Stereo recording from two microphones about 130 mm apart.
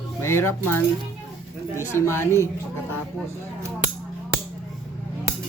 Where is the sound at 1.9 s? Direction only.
20° left (ahead or behind).